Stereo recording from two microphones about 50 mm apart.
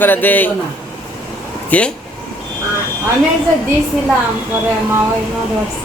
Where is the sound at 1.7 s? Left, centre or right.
Left.